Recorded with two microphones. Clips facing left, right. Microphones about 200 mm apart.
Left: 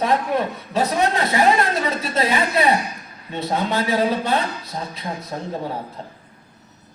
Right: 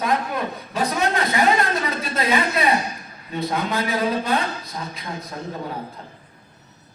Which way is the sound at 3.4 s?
30° left (ahead or behind).